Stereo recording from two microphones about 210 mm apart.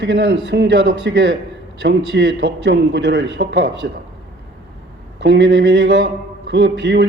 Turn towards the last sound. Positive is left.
turn(degrees=-55)  # may be behind; listen again after turning